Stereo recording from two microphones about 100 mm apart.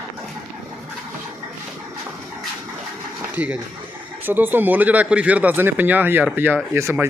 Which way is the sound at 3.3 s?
15° right (ahead or behind).